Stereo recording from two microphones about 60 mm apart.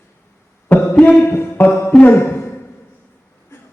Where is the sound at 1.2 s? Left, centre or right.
Left.